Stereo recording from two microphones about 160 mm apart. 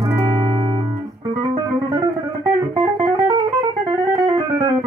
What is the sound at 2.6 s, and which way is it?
Music, 30° right (ahead or behind).